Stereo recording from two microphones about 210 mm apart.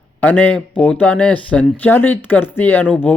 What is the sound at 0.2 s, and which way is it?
Speech, 5° left (ahead or behind).